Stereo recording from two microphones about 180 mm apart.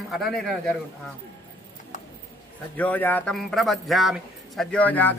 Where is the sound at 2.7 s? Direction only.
10° left (ahead or behind).